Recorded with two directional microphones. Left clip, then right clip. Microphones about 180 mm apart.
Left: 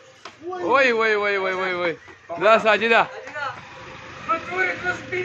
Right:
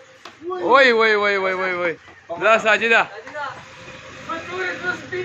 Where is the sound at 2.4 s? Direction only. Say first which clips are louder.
Right 1 dB; 15° left (ahead or behind).